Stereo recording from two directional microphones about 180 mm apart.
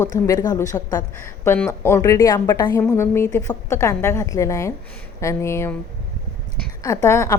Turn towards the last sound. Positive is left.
turn(degrees=15)  # may be behind; listen again after turning